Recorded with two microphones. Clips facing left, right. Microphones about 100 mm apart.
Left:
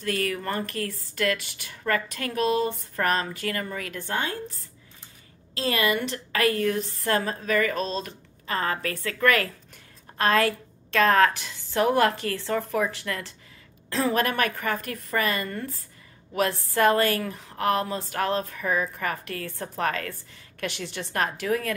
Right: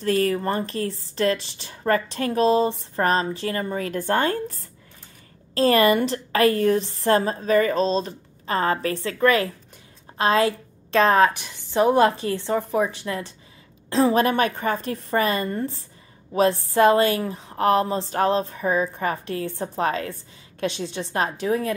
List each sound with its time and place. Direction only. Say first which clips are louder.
0.0 s speech: right 7 dB; 35° right (ahead or behind)
4.0 s a woman's voice: right 8 dB; 45° right (ahead or behind); by 21.7 s 25° right (ahead or behind)